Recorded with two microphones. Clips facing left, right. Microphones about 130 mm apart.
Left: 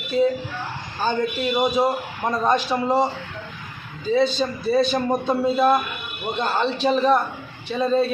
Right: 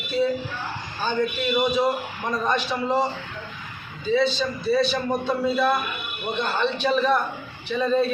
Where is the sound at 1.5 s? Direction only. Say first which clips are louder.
Left 1 dB; 40° left (ahead or behind).